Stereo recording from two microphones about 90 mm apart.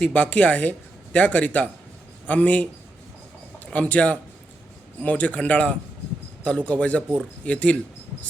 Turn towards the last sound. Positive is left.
turn(degrees=15)  # may be behind; listen again after turning